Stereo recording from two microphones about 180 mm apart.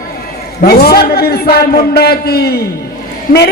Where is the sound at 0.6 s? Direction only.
65° left (ahead or behind).